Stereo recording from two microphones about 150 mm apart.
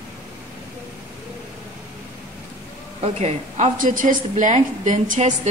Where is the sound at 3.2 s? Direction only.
55° right (ahead or behind).